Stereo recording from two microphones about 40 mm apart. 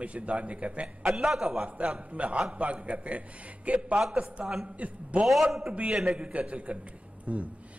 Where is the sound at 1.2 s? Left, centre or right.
Centre.